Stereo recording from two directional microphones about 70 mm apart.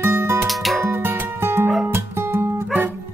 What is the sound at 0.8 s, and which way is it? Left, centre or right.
Music, right.